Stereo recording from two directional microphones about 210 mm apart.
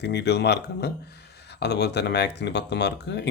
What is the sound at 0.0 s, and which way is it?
Speech, 55° left (ahead or behind).